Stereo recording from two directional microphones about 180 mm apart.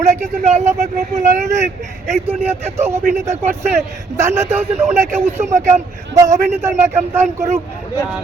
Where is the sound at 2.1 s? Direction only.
35° right (ahead or behind).